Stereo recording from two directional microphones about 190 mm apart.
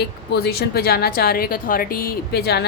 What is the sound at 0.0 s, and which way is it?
A woman's voice, 55° left (ahead or behind).